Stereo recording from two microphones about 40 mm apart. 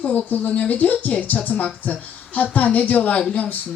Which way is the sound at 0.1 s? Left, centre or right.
Left.